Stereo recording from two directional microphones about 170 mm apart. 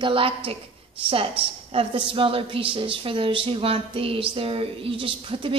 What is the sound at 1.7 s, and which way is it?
A woman's voice, 30° right (ahead or behind).